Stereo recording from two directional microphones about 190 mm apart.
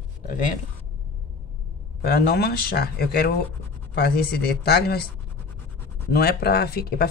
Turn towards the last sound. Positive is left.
turn(degrees=55)  # may be behind; listen again after turning